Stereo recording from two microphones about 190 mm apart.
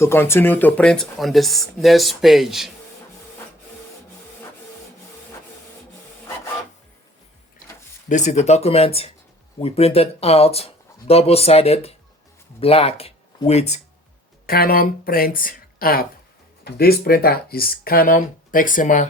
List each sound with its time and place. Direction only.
0.0 s speech: 15° left (ahead or behind)
8.1 s speech: 35° left (ahead or behind)
14.4 s speech: 50° left (ahead or behind)